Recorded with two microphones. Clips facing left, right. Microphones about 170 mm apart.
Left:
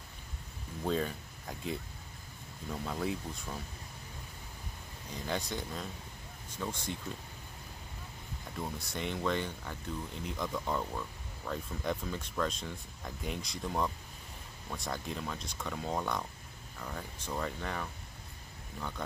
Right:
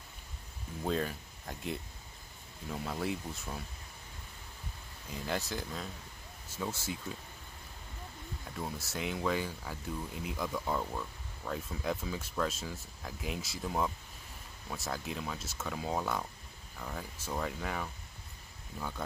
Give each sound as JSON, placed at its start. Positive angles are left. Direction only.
{"t": 0.8, "sound": "speech", "side_deg": 0}
{"t": 5.1, "sound": "speech", "side_deg": 0}
{"t": 8.5, "sound": "speech", "side_deg": -5}